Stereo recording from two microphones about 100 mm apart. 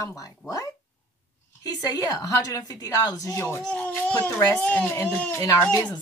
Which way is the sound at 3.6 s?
15° left (ahead or behind).